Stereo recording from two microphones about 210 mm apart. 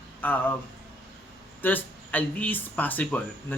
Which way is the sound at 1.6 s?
10° left (ahead or behind).